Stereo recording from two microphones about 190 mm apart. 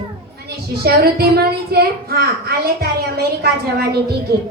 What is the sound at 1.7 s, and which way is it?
A woman's voice, 55° right (ahead or behind).